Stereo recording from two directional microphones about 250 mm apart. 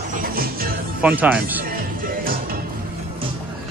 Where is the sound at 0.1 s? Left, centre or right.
Right.